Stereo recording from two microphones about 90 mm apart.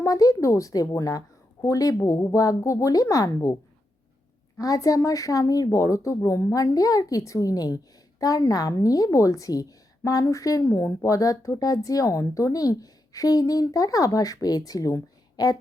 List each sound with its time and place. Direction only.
0.0 s a woman's voice: 40° left (ahead or behind)